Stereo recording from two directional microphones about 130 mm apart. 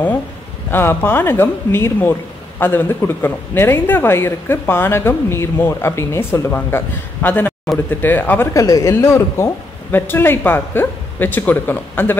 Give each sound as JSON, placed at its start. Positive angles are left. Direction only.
{"t": 0.7, "sound": "a woman's voice", "side_deg": 15}
{"t": 8.6, "sound": "a woman's voice", "side_deg": 25}